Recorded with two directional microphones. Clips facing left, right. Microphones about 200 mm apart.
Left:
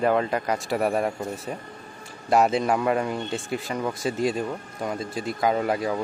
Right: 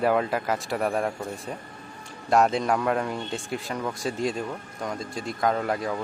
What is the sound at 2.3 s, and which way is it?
Speech, centre (ahead or behind).